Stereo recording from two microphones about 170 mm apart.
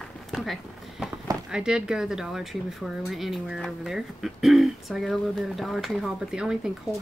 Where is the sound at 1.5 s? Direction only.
5° right (ahead or behind).